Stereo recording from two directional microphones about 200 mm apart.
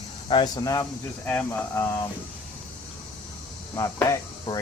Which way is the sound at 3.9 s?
15° left (ahead or behind).